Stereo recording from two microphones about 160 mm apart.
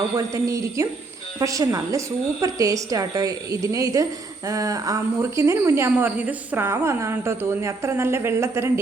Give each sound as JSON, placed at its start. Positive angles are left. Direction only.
{"t": 0.2, "sound": "a woman's voice", "side_deg": -20}